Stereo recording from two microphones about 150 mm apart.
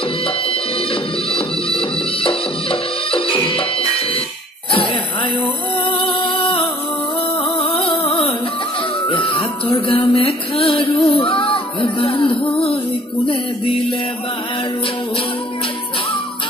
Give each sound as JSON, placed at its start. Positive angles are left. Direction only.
{"t": 1.3, "sound": "music", "side_deg": 35}
{"t": 5.4, "sound": "music", "side_deg": 40}